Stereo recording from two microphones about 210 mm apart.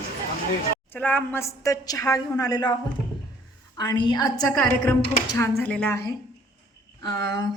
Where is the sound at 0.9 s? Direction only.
10° left (ahead or behind).